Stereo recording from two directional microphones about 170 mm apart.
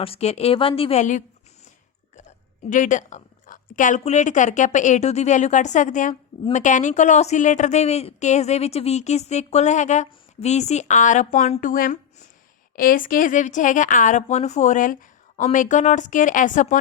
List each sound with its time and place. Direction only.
0.0 s a woman's voice: 35° left (ahead or behind)